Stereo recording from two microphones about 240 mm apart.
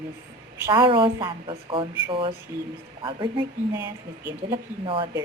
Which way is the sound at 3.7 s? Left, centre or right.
Centre.